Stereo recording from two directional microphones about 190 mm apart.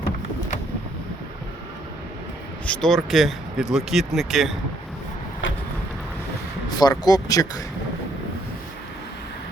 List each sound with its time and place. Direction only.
2.6 s speech: centre (ahead or behind)
6.7 s speech: 20° left (ahead or behind)